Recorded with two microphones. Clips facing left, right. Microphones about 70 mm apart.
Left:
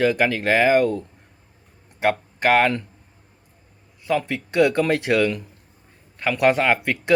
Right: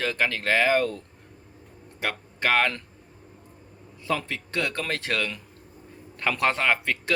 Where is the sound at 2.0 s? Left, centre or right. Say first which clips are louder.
Left 8 dB; left.